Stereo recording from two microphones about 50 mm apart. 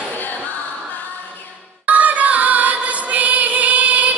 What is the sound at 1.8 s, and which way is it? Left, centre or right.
Music, right.